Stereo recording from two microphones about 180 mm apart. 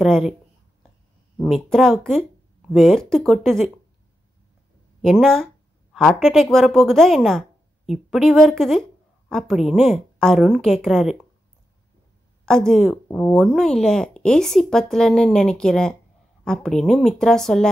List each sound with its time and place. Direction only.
0.0 s a woman's voice: centre (ahead or behind)
1.4 s a woman's voice: centre (ahead or behind)
5.0 s a woman's voice: centre (ahead or behind)
12.4 s a woman's voice: centre (ahead or behind)